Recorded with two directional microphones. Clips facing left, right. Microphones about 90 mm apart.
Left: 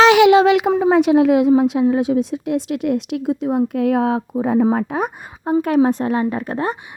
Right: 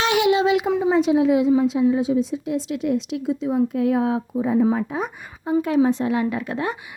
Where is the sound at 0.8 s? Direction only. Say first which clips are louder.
Left 4 dB; 70° left (ahead or behind).